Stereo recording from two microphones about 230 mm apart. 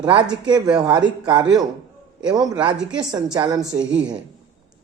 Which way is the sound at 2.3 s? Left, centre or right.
Centre.